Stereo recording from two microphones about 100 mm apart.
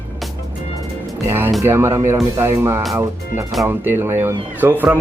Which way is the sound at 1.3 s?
20° right (ahead or behind).